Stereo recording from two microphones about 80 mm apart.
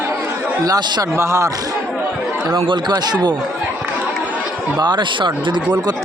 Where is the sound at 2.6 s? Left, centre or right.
Right.